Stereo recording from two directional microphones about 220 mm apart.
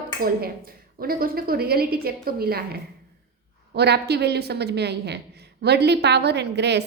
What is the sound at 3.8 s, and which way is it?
A woman's voice, 50° right (ahead or behind).